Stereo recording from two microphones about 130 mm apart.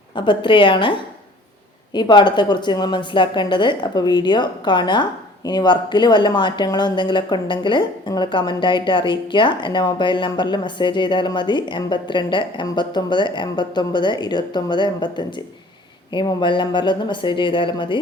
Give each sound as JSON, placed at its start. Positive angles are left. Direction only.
{"t": 0.2, "sound": "speech", "side_deg": 40}